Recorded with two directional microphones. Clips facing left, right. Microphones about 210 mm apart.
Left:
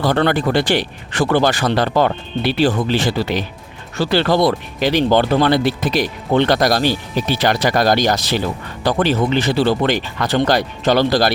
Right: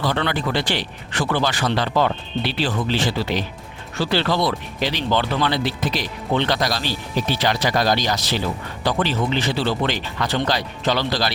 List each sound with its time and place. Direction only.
0.0 s speech: 50° left (ahead or behind)